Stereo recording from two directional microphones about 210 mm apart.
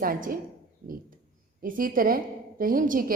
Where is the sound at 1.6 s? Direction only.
40° right (ahead or behind).